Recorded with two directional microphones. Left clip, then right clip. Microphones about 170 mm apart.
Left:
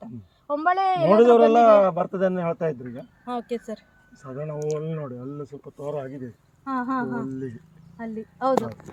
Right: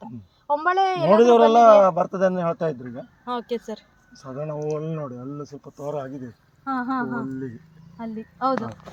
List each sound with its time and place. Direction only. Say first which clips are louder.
0.0 s a sound: right 2 dB; 30° right (ahead or behind)
1.1 s a man's voice: right 1 dB; 10° left (ahead or behind)
3.2 s speech: right 2 dB; 40° right (ahead or behind)
4.2 s a man's voice: right 1 dB; 5° left (ahead or behind)
6.7 s speech: right 1 dB; 15° right (ahead or behind)